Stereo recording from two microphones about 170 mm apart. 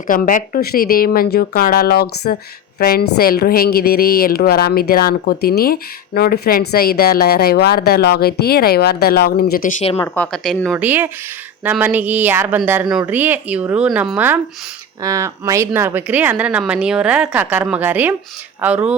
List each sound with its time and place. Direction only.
0.1 s a woman's voice: 55° left (ahead or behind)
10.3 s a woman's voice: 5° left (ahead or behind)
10.8 s speech: 10° right (ahead or behind)